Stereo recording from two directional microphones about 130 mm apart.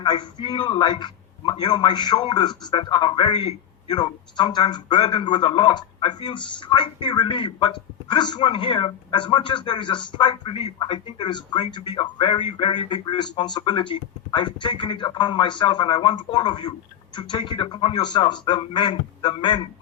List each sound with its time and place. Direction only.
0.0 s a man's voice: 35° left (ahead or behind)